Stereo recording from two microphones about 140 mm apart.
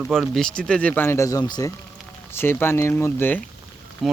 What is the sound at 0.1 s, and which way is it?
Speech, 5° left (ahead or behind).